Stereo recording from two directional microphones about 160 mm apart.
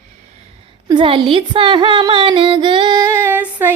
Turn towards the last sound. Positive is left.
turn(degrees=-15)  # may be behind; listen again after turning